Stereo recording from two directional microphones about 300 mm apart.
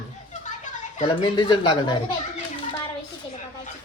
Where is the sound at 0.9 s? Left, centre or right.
Centre.